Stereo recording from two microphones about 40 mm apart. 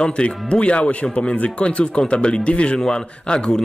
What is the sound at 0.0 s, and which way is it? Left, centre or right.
Speech, left.